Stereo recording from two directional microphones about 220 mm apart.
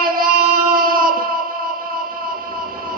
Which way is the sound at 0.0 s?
40° right (ahead or behind).